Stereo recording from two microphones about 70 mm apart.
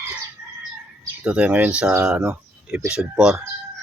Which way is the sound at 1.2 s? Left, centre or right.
Centre.